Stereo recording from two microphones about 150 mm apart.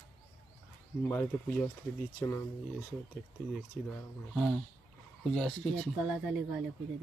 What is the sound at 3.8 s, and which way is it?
Speech, centre (ahead or behind).